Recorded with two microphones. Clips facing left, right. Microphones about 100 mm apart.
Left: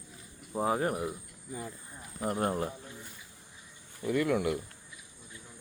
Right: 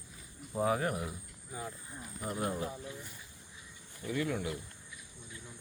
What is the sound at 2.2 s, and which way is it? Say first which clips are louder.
Speech: left 5 dB; 50° left (ahead or behind).